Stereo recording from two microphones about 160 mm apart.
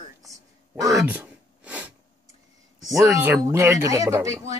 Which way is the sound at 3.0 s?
15° right (ahead or behind).